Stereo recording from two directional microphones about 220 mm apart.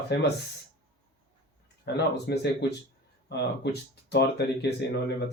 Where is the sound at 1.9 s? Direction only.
50° left (ahead or behind).